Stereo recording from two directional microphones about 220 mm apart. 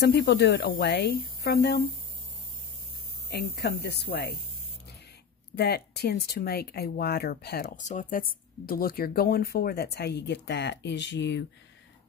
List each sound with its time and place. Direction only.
0.1 s speech: 50° left (ahead or behind)
3.3 s speech: 50° left (ahead or behind)
5.6 s speech: 45° left (ahead or behind)